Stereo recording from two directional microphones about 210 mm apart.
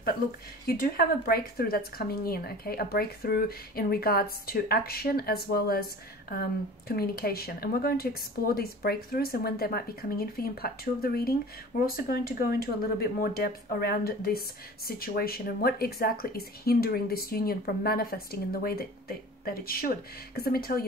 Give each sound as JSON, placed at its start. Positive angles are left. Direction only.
{"t": 0.7, "sound": "speech", "side_deg": 45}